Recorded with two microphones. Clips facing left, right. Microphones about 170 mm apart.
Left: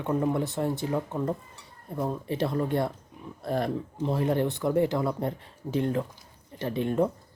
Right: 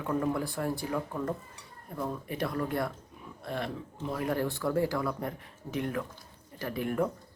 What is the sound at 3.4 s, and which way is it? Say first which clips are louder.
Speech: left 7 dB; 40° left (ahead or behind).